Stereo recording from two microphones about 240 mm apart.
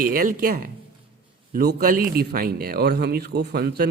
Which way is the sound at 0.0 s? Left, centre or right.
Right.